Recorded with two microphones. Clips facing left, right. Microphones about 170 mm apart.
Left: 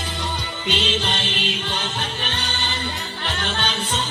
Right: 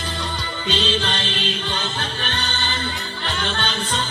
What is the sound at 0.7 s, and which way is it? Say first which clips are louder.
Music: right 1 dB; 15° left (ahead or behind).